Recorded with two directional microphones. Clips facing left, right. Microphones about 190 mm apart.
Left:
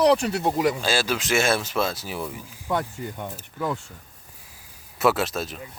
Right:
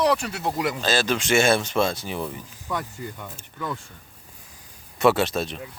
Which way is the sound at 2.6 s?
35° left (ahead or behind).